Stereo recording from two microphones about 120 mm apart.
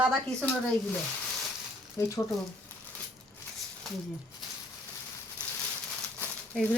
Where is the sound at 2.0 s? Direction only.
25° left (ahead or behind).